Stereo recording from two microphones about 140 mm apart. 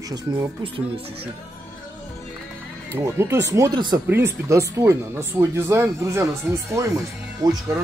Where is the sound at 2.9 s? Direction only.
20° right (ahead or behind).